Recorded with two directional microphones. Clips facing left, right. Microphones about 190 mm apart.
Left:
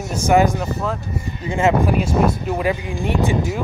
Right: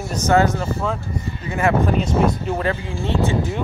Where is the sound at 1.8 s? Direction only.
10° left (ahead or behind).